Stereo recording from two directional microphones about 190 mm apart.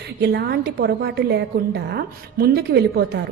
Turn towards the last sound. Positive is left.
turn(degrees=-55)  # may be behind; listen again after turning